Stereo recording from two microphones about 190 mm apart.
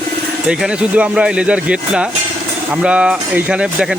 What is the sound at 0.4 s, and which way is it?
Speech, 5° right (ahead or behind).